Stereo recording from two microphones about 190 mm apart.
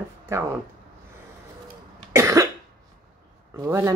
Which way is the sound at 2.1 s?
15° right (ahead or behind).